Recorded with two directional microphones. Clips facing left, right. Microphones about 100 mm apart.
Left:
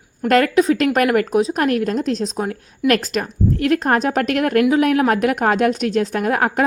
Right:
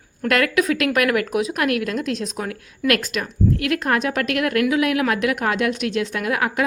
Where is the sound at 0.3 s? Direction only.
35° left (ahead or behind).